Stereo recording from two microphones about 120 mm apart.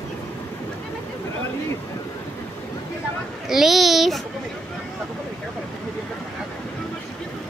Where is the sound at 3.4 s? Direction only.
5° right (ahead or behind).